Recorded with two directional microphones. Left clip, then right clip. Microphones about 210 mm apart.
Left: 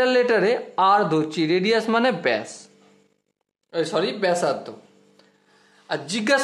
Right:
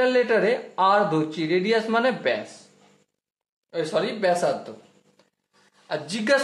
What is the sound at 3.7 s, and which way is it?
Speech, 40° left (ahead or behind).